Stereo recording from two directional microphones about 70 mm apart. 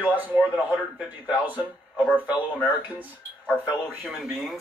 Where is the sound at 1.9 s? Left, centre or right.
Centre.